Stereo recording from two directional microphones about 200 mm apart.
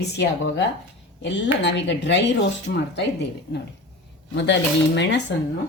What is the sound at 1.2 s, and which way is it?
Speech, 60° left (ahead or behind).